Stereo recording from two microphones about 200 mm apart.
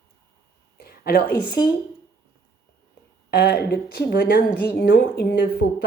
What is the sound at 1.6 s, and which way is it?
Speech, 20° left (ahead or behind).